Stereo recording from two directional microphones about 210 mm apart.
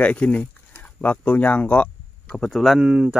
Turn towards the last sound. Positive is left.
turn(degrees=-5)  # may be behind; listen again after turning